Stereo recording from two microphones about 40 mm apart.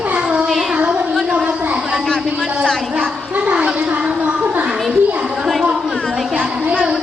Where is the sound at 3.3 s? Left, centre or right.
Right.